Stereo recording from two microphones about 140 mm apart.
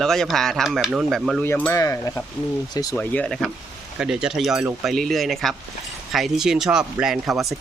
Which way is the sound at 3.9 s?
5° right (ahead or behind).